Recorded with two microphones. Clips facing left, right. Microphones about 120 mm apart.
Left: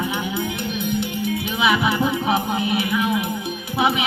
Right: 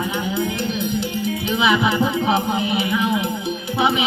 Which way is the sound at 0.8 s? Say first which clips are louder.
Right 1 dB; 55° left (ahead or behind).